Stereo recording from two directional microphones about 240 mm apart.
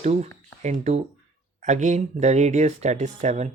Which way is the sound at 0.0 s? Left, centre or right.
Right.